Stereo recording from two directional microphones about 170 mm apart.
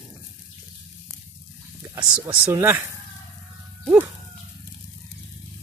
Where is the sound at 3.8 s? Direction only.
10° right (ahead or behind).